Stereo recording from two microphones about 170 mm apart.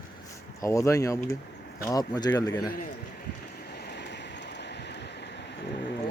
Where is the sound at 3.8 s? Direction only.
75° left (ahead or behind).